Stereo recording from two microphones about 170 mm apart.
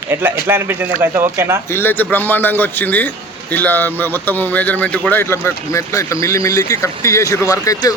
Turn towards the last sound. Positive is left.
turn(degrees=20)  # may be behind; listen again after turning